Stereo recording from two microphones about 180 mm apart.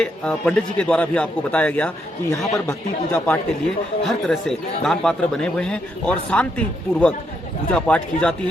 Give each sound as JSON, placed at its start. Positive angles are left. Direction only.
{"t": 0.0, "sound": "speech", "side_deg": 5}